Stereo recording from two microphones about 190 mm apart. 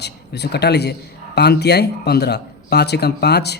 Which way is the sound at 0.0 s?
60° left (ahead or behind).